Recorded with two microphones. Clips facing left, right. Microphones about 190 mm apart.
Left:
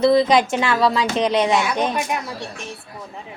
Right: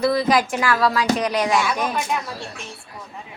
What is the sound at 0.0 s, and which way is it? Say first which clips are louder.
Speech: left 4 dB; 25° left (ahead or behind).